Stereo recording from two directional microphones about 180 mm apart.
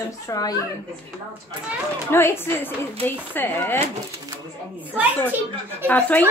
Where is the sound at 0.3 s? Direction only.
20° left (ahead or behind).